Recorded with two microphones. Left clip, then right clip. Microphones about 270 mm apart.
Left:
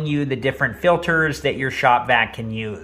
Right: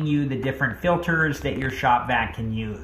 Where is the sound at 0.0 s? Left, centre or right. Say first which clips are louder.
Left 4 dB; centre.